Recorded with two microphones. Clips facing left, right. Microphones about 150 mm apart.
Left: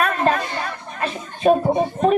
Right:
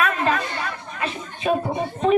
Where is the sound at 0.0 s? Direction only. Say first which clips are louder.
Left 2 dB; 40° left (ahead or behind).